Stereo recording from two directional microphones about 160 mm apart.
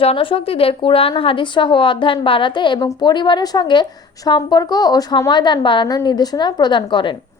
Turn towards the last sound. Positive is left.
turn(degrees=30)  # may be behind; listen again after turning